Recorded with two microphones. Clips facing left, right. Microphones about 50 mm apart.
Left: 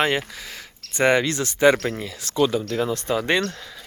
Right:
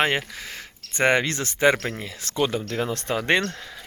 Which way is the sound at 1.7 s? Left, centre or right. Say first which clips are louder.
Left 3 dB; centre.